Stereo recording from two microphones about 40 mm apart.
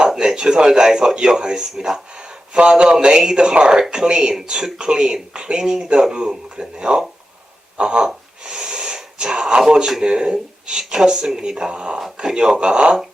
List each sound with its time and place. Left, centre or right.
0.0 s speech: centre
8.0 s a sound: centre
10.1 s speech: right
10.7 s speech: centre
11.4 s speech: right
11.9 s speech: centre
12.5 s speech: right